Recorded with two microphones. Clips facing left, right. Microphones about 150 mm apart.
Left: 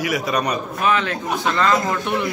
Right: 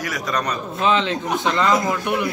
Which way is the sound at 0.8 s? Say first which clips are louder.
Right 2 dB; 20° right (ahead or behind).